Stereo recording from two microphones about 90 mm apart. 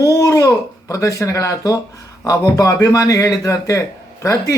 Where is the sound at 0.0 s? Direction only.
40° left (ahead or behind).